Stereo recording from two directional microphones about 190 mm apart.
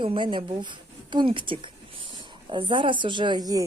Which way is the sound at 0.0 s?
25° right (ahead or behind).